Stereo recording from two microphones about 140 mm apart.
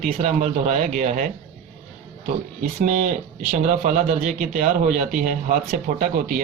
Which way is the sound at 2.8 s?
65° right (ahead or behind).